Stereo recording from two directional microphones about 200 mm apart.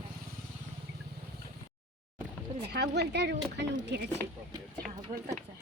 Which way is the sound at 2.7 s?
55° right (ahead or behind).